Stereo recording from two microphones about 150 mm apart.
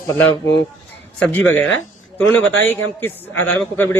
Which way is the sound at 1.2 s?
10° left (ahead or behind).